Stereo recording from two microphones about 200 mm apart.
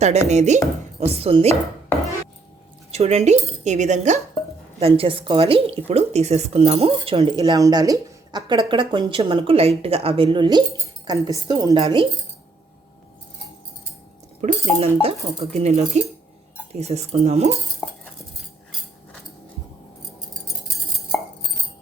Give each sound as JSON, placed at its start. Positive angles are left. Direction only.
{"t": 0.0, "sound": "speech", "side_deg": -35}
{"t": 2.9, "sound": "speech", "side_deg": -30}
{"t": 14.4, "sound": "speech", "side_deg": -30}